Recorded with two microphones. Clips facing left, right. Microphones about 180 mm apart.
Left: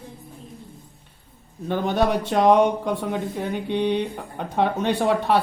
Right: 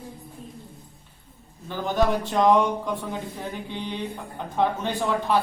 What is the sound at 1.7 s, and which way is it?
Speech, 70° left (ahead or behind).